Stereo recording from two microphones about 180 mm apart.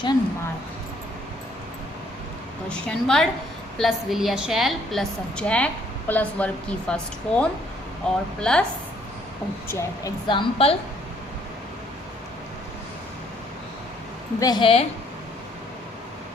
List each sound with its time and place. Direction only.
2.6 s a woman's voice: 5° left (ahead or behind)
9.6 s a woman's voice: 15° left (ahead or behind)
10.2 s a woman's voice: 30° left (ahead or behind)
14.3 s a woman's voice: 20° left (ahead or behind)